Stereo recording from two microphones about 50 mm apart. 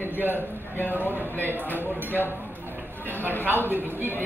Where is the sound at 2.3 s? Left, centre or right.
Right.